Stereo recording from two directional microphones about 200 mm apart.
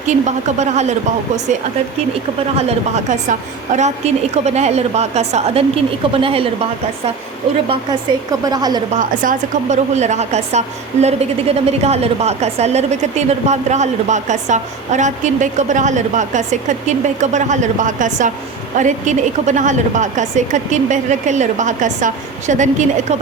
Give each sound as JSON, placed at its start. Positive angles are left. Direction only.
{"t": 0.1, "sound": "a woman's voice", "side_deg": -35}
{"t": 2.6, "sound": "a woman's voice", "side_deg": -35}
{"t": 7.7, "sound": "a woman's voice", "side_deg": -20}
{"t": 9.0, "sound": "a woman's voice", "side_deg": -40}